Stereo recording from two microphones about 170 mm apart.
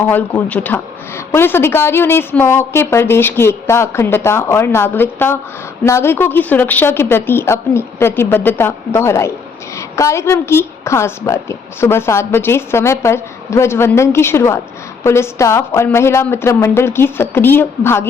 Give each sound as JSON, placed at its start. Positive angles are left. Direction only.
{"t": 0.1, "sound": "a woman's voice", "side_deg": 10}